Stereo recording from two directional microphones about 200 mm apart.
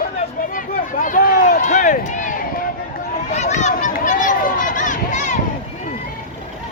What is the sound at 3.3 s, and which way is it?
Run, 35° left (ahead or behind).